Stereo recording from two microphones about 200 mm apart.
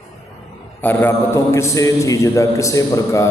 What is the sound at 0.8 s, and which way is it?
A man's voice, 10° left (ahead or behind).